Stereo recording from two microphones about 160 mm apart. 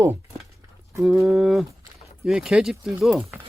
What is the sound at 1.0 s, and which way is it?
Speech, 5° right (ahead or behind).